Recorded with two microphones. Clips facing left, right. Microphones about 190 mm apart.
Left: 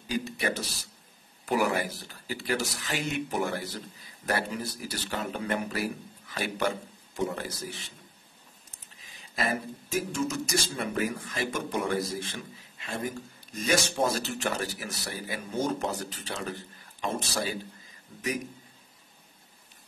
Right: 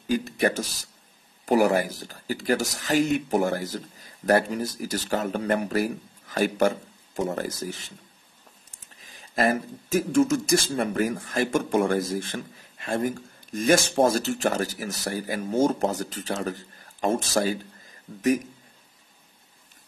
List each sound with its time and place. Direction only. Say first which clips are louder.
1.4 s speech: right 6 dB; 40° right (ahead or behind)
9.2 s speech: right 7 dB; 45° right (ahead or behind)